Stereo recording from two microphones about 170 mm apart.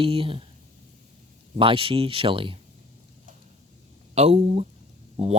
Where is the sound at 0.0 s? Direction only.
35° right (ahead or behind).